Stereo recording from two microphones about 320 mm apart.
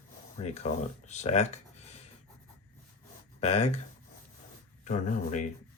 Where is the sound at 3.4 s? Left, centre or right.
Centre.